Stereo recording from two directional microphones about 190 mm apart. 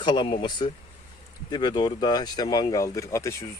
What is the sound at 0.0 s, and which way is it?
Speech, 25° left (ahead or behind).